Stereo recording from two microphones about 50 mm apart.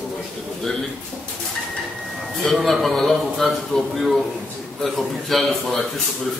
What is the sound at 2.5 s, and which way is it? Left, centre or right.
A man's voice, centre.